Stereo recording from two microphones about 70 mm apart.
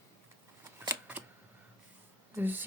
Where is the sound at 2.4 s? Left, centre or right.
Right.